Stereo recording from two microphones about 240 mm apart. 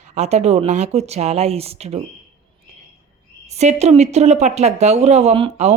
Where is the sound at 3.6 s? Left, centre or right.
Right.